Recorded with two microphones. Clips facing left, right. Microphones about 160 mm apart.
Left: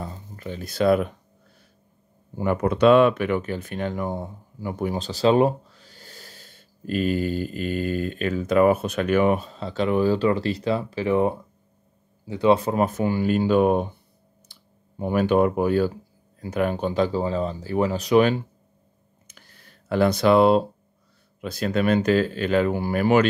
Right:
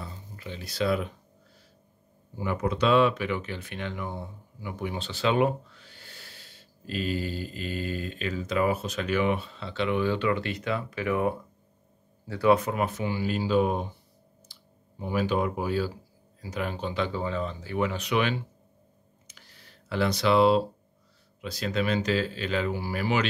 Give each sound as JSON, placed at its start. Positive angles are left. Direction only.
{"t": 0.0, "sound": "a sound", "side_deg": 45}
{"t": 2.3, "sound": "speech", "side_deg": 55}
{"t": 19.2, "sound": "computer keyboard", "side_deg": 50}
{"t": 21.4, "sound": "speech", "side_deg": 50}